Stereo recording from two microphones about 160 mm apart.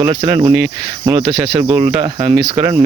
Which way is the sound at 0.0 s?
25° right (ahead or behind).